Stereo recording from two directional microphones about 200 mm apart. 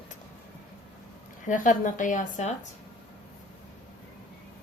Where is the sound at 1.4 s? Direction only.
40° left (ahead or behind).